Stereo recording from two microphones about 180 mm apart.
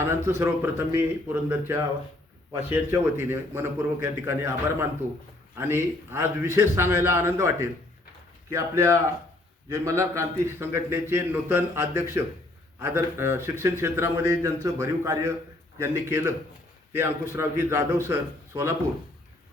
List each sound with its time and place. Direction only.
0.0 s speech: 15° right (ahead or behind)